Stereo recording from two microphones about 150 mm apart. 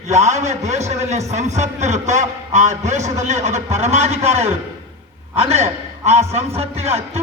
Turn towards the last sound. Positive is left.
turn(degrees=-45)  # may be behind; listen again after turning